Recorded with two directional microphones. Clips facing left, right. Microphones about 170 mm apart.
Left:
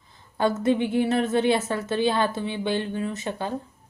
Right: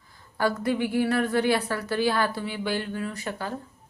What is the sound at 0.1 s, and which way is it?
Speech, 25° left (ahead or behind).